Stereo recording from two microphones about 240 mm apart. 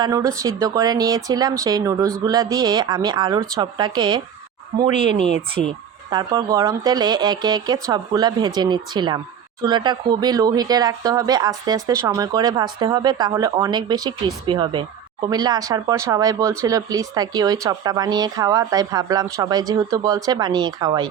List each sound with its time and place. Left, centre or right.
0.0 s speech: centre
5.6 s speech: centre